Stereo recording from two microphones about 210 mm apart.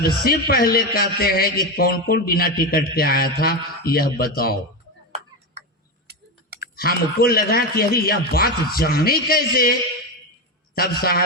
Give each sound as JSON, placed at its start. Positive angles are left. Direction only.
{"t": 0.0, "sound": "a man's voice", "side_deg": 45}
{"t": 6.1, "sound": "tick-tock", "side_deg": -50}
{"t": 6.6, "sound": "a man's voice", "side_deg": 45}
{"t": 10.8, "sound": "a man's voice", "side_deg": 45}